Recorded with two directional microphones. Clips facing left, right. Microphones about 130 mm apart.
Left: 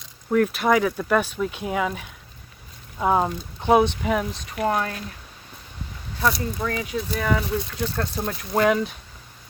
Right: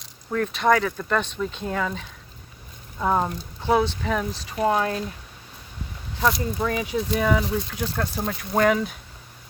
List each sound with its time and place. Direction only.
0.3 s speech: 5° left (ahead or behind)
4.5 s speech: 20° right (ahead or behind)
6.1 s speech: 15° right (ahead or behind)
8.3 s speech: centre (ahead or behind)